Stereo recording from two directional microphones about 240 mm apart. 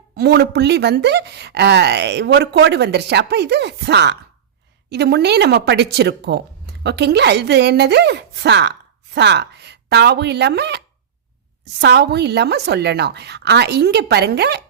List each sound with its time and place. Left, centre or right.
0.2 s speech: right